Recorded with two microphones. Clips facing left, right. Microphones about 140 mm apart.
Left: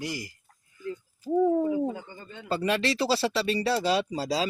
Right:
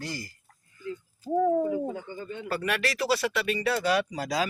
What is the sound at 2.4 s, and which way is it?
Speech, 25° left (ahead or behind).